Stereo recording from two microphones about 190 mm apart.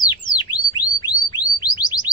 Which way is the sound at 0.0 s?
20° left (ahead or behind).